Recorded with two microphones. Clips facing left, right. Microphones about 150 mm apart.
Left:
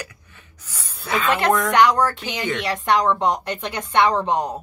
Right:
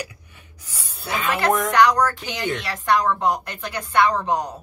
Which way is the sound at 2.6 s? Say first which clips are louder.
Left 2 dB; 20° left (ahead or behind).